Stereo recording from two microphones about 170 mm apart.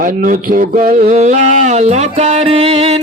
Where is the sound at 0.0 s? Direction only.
50° right (ahead or behind).